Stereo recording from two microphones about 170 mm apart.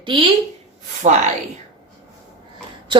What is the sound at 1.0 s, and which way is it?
Speech, 45° right (ahead or behind).